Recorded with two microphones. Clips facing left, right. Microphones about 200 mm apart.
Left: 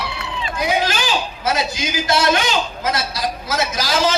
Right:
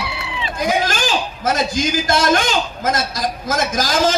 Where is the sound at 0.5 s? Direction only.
45° right (ahead or behind).